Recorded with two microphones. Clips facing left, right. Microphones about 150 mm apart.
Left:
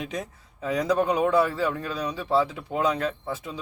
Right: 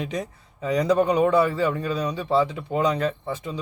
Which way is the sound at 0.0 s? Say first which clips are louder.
Right 3 dB; centre (ahead or behind).